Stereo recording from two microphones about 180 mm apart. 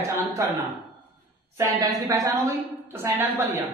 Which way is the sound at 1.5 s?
20° right (ahead or behind).